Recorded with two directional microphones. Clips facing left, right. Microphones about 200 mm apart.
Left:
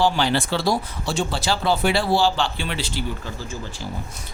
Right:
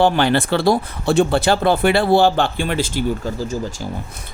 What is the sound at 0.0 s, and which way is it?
Speech, 60° right (ahead or behind).